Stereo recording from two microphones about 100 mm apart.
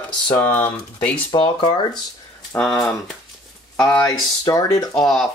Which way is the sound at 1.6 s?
45° left (ahead or behind).